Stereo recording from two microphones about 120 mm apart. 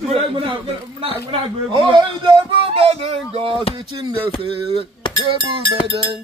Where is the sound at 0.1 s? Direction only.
45° right (ahead or behind).